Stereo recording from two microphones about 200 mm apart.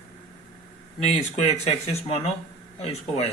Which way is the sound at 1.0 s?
35° left (ahead or behind).